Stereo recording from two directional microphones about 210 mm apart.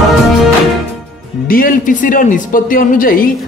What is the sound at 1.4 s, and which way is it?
A man's voice, 40° left (ahead or behind).